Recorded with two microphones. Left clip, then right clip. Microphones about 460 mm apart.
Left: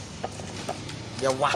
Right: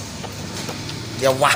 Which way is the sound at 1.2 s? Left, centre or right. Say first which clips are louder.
Right 8 dB; left.